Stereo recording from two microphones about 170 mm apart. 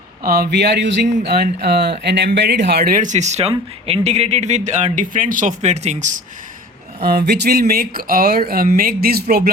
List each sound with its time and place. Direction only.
0.2 s speech: 65° right (ahead or behind); by 0.9 s 90° right
1.2 s speech: 70° right (ahead or behind); by 6.2 s 45° right (ahead or behind)
7.0 s speech: 70° right (ahead or behind)